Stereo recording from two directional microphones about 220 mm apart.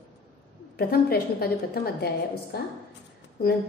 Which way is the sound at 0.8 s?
45° left (ahead or behind).